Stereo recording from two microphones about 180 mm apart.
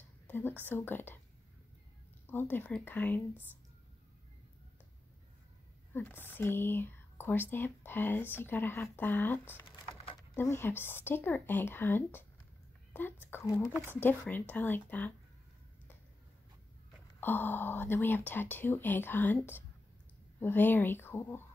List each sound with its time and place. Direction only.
0.3 s a woman's voice: 10° left (ahead or behind)
2.2 s speech: 10° left (ahead or behind)
5.9 s speech: 10° left (ahead or behind)
9.7 s splinter: 30° left (ahead or behind)
10.3 s speech: 15° left (ahead or behind)
17.2 s speech: 10° left (ahead or behind)